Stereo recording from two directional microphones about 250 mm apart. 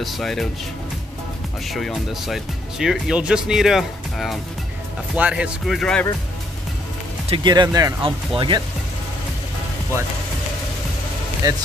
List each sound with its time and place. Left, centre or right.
0.0 s speech: centre
1.7 s speech: centre
7.2 s speech: centre